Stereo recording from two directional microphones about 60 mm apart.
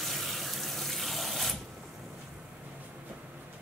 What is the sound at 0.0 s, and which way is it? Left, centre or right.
Water, centre.